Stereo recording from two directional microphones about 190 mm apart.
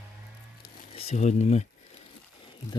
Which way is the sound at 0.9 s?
35° left (ahead or behind).